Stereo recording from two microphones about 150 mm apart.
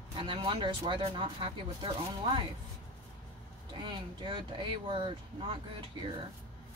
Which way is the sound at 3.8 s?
30° right (ahead or behind).